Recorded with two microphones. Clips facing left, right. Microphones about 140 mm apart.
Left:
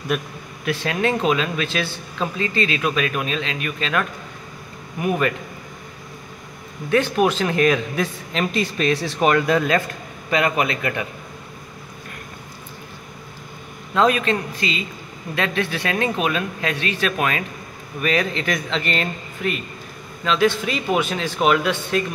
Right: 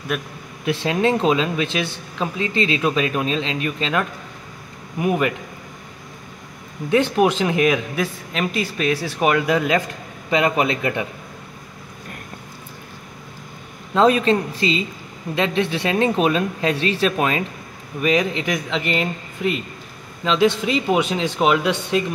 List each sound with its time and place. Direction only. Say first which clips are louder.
0.1 s a man's voice: left 1 dB; centre (ahead or behind)
0.7 s speech: right 3 dB; 25° right (ahead or behind)
6.9 s speech: right 1 dB; 20° right (ahead or behind)
10.3 s speech: right 2 dB; 25° right (ahead or behind)
13.9 s speech: right 3 dB; 30° right (ahead or behind)